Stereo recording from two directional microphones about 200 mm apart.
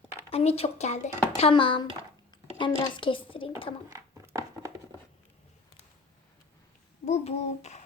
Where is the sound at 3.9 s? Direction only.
15° right (ahead or behind).